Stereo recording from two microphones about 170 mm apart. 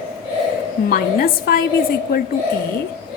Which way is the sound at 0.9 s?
60° left (ahead or behind).